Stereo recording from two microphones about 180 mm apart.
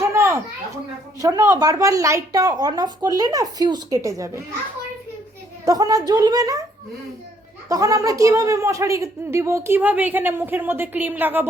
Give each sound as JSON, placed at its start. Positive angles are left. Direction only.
{"t": 0.0, "sound": "a sound", "side_deg": -15}
{"t": 1.2, "sound": "speech", "side_deg": -20}
{"t": 5.6, "sound": "speech", "side_deg": -20}
{"t": 7.7, "sound": "a woman's voice", "side_deg": -20}